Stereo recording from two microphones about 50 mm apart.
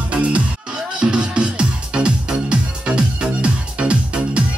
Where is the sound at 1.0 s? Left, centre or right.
Centre.